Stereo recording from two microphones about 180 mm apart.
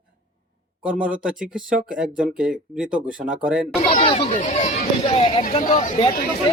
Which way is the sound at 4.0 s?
30° left (ahead or behind).